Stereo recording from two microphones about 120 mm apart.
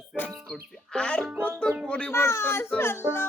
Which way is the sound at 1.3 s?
15° right (ahead or behind).